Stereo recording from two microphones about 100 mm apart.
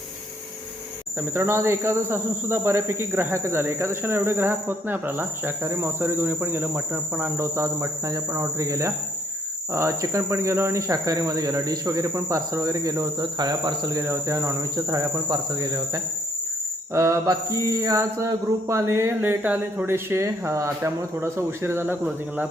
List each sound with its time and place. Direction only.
1.2 s cricket: 25° right (ahead or behind)
9.7 s speech: 30° right (ahead or behind)
16.9 s cricket: 30° right (ahead or behind)